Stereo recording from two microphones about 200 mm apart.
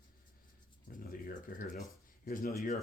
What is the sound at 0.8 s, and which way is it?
Speech, 45° left (ahead or behind).